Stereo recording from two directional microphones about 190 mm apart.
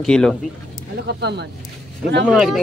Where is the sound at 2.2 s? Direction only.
Centre (ahead or behind).